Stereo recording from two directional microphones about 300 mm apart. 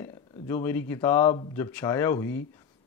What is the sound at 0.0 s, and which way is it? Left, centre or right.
Speech, centre.